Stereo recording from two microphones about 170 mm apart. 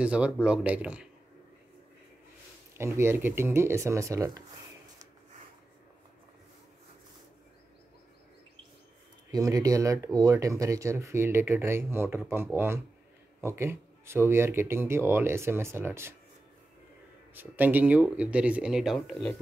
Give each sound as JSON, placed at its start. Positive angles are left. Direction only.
{"t": 0.0, "sound": "speech", "side_deg": -5}
{"t": 2.8, "sound": "speech", "side_deg": -15}
{"t": 9.3, "sound": "speech", "side_deg": -20}
{"t": 17.3, "sound": "speech", "side_deg": -10}